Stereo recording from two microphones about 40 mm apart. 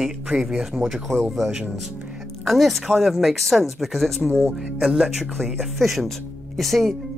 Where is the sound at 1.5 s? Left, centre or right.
Centre.